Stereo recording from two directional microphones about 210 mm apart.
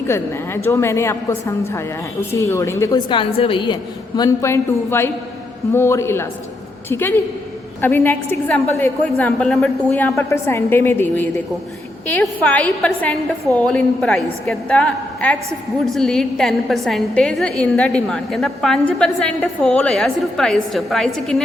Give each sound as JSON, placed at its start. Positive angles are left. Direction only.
{"t": 0.1, "sound": "a woman's voice", "side_deg": 10}